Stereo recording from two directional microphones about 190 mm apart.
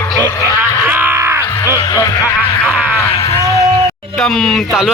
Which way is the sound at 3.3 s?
20° left (ahead or behind).